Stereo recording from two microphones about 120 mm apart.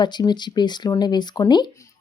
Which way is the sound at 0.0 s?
35° left (ahead or behind).